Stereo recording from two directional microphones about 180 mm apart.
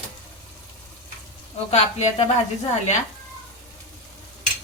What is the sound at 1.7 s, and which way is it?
Speech, 35° left (ahead or behind).